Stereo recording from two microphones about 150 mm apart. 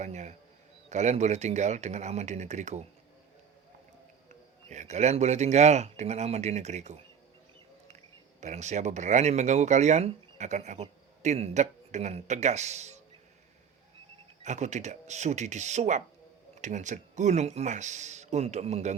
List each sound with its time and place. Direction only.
0.0 s speech: 50° right (ahead or behind)
4.7 s speech: 50° right (ahead or behind)
8.4 s speech: 50° right (ahead or behind)
14.4 s speech: 50° right (ahead or behind)